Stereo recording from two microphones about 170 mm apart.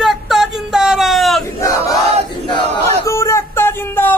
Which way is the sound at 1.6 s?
20° left (ahead or behind).